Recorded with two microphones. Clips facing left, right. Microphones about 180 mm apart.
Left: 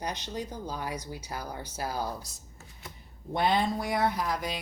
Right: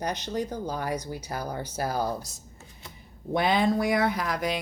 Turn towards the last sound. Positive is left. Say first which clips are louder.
# right 3 dB
turn(degrees=-75)  # may be behind; listen again after turning